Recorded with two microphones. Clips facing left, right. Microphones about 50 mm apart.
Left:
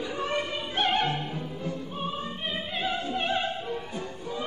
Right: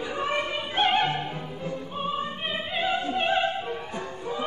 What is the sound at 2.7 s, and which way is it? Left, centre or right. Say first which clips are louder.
Music: right 4 dB; right.